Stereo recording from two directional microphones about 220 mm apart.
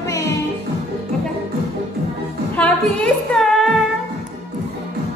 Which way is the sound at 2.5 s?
5° left (ahead or behind).